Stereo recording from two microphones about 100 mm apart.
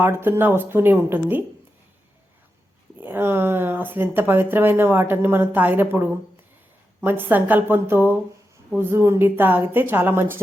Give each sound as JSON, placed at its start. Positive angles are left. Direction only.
{"t": 0.0, "sound": "speech", "side_deg": -20}
{"t": 3.0, "sound": "speech", "side_deg": -20}